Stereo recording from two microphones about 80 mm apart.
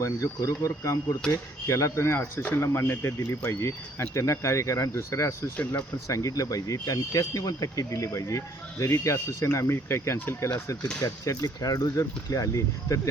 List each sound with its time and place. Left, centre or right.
0.0 s speech: left
11.0 s speech: left